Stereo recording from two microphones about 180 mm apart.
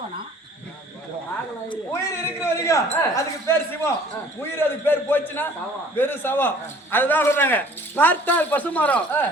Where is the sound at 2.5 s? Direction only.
15° left (ahead or behind).